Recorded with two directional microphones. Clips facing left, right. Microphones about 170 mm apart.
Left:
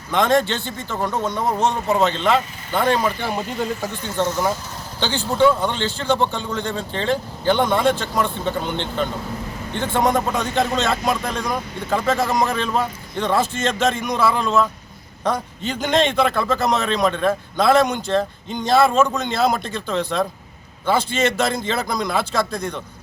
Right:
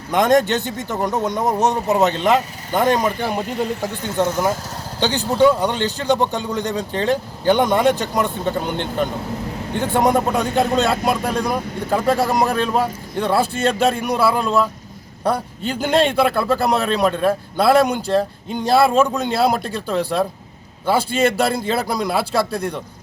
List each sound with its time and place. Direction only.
0.1 s a man's voice: 15° right (ahead or behind)
9.7 s a man's voice: 15° right (ahead or behind)